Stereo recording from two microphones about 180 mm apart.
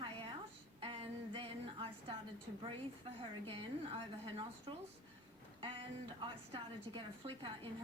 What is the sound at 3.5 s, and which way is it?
Speech, 30° right (ahead or behind).